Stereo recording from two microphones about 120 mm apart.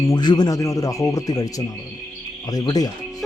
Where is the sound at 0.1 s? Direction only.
35° left (ahead or behind).